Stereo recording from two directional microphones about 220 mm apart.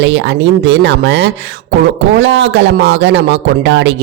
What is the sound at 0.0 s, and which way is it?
Speech, 55° right (ahead or behind).